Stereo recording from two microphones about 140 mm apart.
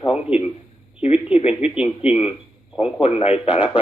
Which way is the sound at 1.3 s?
45° left (ahead or behind).